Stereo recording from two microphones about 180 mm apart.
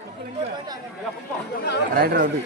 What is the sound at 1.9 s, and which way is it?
Speech, 55° right (ahead or behind).